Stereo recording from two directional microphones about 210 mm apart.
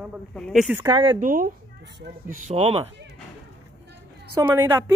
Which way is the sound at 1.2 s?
40° right (ahead or behind).